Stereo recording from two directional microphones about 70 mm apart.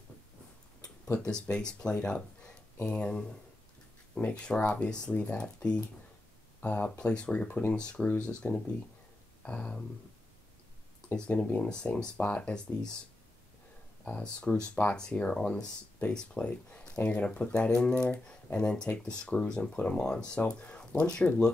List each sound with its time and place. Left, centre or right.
1.3 s speech: centre
9.4 s a sound: centre
11.1 s speech: centre
14.0 s speech: centre